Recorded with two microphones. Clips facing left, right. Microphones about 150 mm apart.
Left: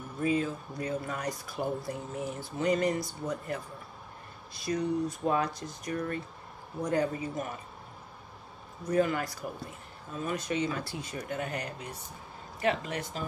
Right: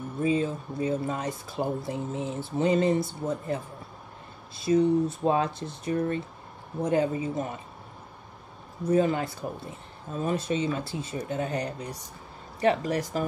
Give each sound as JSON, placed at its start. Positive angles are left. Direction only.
{"t": 0.2, "sound": "speech", "side_deg": -25}
{"t": 8.9, "sound": "speech", "side_deg": -25}